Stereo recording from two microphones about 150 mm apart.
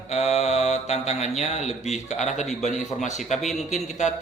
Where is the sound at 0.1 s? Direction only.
45° left (ahead or behind).